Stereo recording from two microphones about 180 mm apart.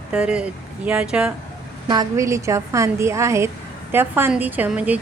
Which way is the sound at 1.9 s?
20° right (ahead or behind).